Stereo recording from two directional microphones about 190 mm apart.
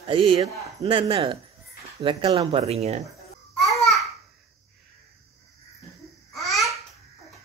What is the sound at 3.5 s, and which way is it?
Babbling, centre (ahead or behind).